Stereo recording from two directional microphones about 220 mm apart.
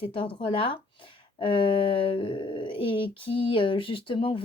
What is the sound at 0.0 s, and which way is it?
A woman's voice, 25° left (ahead or behind).